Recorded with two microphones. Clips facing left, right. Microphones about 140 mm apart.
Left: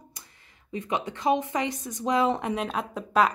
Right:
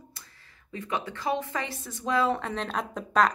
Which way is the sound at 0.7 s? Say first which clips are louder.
Left 3 dB; 20° left (ahead or behind).